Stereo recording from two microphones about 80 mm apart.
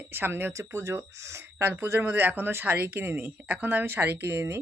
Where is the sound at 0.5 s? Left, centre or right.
Right.